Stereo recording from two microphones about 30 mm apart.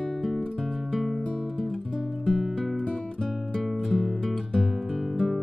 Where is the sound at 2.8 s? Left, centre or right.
Left.